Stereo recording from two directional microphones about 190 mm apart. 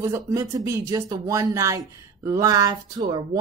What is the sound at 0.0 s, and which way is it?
Speech, 15° right (ahead or behind).